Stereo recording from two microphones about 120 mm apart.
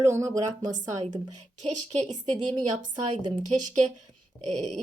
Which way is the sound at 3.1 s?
45° right (ahead or behind).